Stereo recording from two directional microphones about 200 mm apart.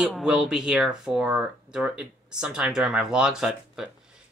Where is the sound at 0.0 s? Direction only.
5° right (ahead or behind).